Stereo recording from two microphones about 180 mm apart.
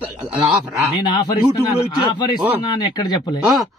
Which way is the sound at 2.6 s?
25° left (ahead or behind).